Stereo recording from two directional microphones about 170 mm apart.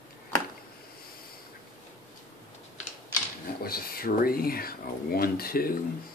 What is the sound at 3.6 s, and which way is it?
Speech, 60° left (ahead or behind).